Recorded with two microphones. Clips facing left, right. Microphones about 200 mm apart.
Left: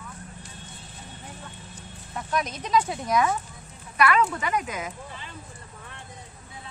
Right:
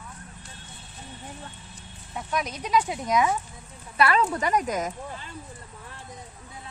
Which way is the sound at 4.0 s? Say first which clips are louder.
Even; 30° right (ahead or behind).